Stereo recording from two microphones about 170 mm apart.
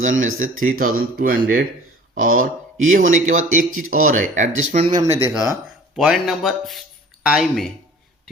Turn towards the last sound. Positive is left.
turn(degrees=0)  # may be behind; listen again after turning